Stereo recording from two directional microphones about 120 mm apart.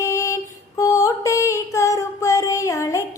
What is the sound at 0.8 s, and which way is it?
Music, 25° left (ahead or behind).